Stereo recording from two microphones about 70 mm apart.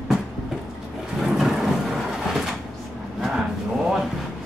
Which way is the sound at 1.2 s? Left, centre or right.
Centre.